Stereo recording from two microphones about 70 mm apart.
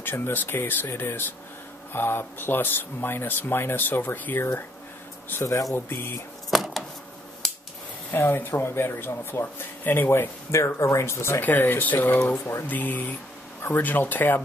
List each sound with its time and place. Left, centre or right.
0.0 s speech: left
5.3 s speech: left
5.9 s speech: left
6.5 s a sound: centre
8.1 s speech: left
10.5 s speech: left